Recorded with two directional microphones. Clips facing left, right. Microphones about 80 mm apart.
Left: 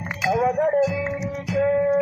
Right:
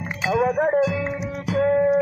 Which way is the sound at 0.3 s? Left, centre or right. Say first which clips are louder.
Right 1 dB; right.